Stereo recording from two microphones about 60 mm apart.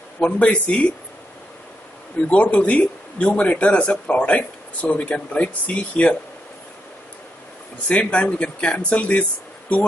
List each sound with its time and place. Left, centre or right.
0.2 s a man's voice: left
2.2 s a man's voice: left
7.9 s a man's voice: centre